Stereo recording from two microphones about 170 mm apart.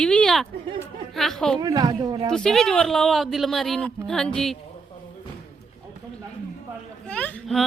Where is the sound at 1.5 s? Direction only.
25° right (ahead or behind).